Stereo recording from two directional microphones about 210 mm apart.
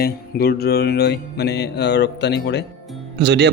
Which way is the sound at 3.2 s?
50° right (ahead or behind).